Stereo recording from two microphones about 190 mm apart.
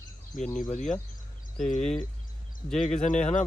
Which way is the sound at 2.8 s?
40° left (ahead or behind).